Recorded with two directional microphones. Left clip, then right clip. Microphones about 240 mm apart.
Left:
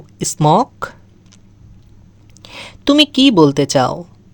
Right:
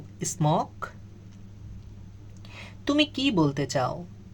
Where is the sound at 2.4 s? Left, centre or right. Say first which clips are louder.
Left 13 dB; left.